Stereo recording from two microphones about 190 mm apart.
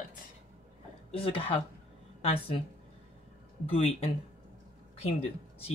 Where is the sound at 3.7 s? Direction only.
30° left (ahead or behind).